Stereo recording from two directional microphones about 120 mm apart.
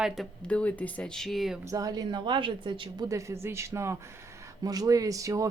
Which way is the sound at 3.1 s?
25° right (ahead or behind).